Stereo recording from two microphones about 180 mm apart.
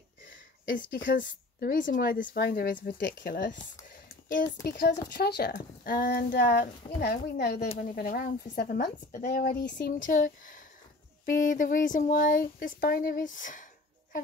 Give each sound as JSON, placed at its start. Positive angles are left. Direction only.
{"t": 0.7, "sound": "a woman's voice", "side_deg": 50}
{"t": 3.0, "sound": "speech", "side_deg": 80}
{"t": 3.4, "sound": "a sound", "side_deg": 45}
{"t": 4.6, "sound": "a woman's voice", "side_deg": 55}
{"t": 5.5, "sound": "speech", "side_deg": 50}
{"t": 6.3, "sound": "a woman's voice", "side_deg": 65}
{"t": 7.9, "sound": "a woman's voice", "side_deg": 50}
{"t": 9.9, "sound": "speech", "side_deg": 45}